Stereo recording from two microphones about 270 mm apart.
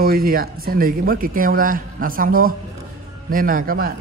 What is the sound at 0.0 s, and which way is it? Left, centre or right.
A man's voice, right.